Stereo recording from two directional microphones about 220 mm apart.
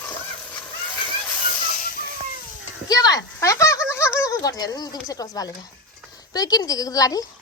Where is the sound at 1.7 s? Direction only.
40° left (ahead or behind).